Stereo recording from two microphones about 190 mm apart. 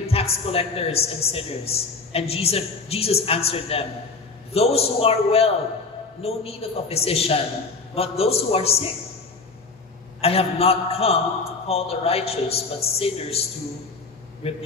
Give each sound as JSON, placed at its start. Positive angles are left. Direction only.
{"t": 0.0, "sound": "a woman's voice", "side_deg": 30}
{"t": 10.2, "sound": "a woman's voice", "side_deg": 30}